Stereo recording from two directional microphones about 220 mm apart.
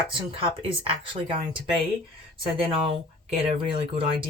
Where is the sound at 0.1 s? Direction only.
25° right (ahead or behind).